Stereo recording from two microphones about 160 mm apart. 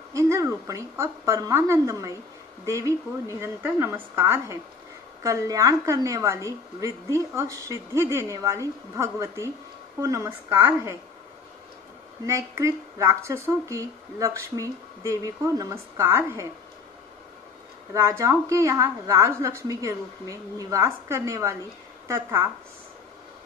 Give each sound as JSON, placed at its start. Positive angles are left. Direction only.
{"t": 0.1, "sound": "a woman's voice", "side_deg": -20}
{"t": 12.3, "sound": "speech", "side_deg": -20}
{"t": 17.9, "sound": "a woman's voice", "side_deg": -15}